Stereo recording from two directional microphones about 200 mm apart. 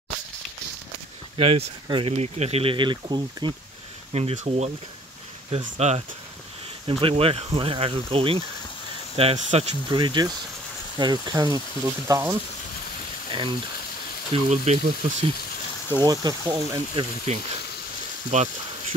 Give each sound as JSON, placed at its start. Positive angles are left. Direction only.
{"t": 1.3, "sound": "speech", "side_deg": -25}
{"t": 5.8, "sound": "speech", "side_deg": -35}
{"t": 13.3, "sound": "speech", "side_deg": -25}
{"t": 16.0, "sound": "speech", "side_deg": -20}
{"t": 17.3, "sound": "speech", "side_deg": -35}